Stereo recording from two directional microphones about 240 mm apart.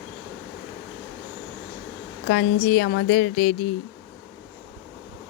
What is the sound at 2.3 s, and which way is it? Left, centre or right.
Speech, left.